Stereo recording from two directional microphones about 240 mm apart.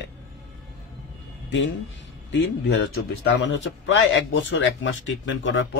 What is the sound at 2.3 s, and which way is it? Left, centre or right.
Speech, left.